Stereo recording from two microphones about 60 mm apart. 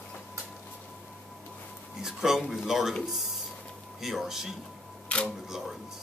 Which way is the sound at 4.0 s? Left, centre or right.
Centre.